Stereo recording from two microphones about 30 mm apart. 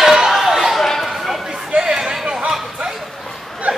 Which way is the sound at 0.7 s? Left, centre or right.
Centre.